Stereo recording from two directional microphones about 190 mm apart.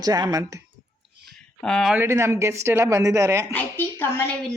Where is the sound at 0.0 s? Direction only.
20° right (ahead or behind).